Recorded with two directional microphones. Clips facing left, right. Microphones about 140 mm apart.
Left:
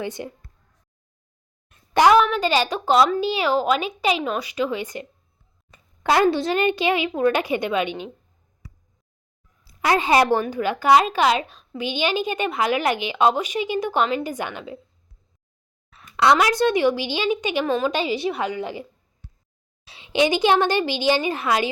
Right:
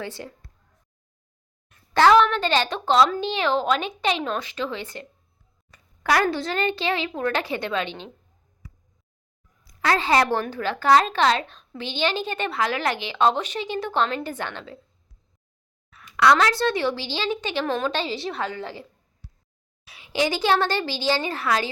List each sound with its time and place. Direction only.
0.0 s speech: 20° left (ahead or behind)
1.9 s a woman's voice: 15° left (ahead or behind)
9.6 s a woman's voice: 20° left (ahead or behind)
16.1 s a woman's voice: 20° left (ahead or behind)
19.8 s a woman's voice: 25° left (ahead or behind)